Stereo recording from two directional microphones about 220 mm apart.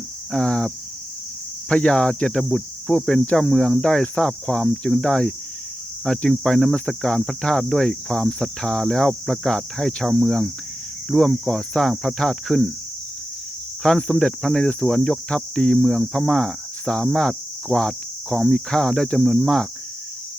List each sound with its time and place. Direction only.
0.3 s cricket: 5° left (ahead or behind)
1.7 s cricket: 5° left (ahead or behind)
13.8 s cricket: 5° left (ahead or behind)